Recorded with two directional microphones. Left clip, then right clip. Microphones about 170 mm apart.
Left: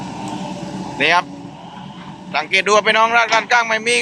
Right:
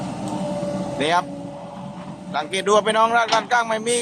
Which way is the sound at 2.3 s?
15° right (ahead or behind).